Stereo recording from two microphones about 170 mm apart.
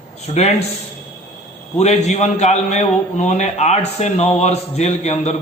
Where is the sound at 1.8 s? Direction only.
40° left (ahead or behind).